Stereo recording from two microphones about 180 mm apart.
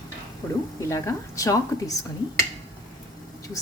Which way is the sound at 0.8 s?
15° left (ahead or behind).